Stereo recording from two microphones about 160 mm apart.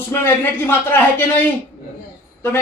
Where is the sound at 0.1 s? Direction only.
15° left (ahead or behind).